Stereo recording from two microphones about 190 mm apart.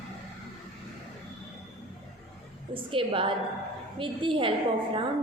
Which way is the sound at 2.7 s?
25° right (ahead or behind).